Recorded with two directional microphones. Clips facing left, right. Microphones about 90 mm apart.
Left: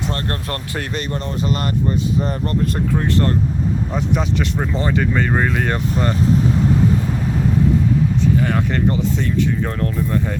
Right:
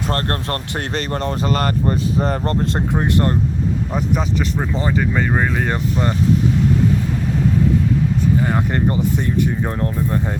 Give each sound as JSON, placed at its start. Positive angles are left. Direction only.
{"t": 0.1, "sound": "speech", "side_deg": -40}
{"t": 2.9, "sound": "speech", "side_deg": -20}
{"t": 3.9, "sound": "speech", "side_deg": 0}
{"t": 8.5, "sound": "speech", "side_deg": -20}